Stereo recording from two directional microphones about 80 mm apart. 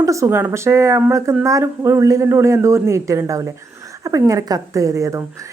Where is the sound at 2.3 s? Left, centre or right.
Right.